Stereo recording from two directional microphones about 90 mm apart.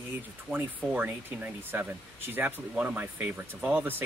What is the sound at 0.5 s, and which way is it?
Speech, 15° left (ahead or behind).